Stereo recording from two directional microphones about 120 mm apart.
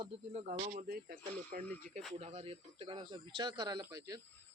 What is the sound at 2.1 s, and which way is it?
Speech, 60° right (ahead or behind).